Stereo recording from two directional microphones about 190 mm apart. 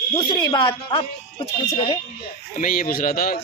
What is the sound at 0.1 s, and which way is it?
Speech, 20° left (ahead or behind).